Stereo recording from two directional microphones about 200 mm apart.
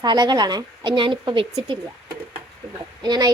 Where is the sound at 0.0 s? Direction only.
20° right (ahead or behind).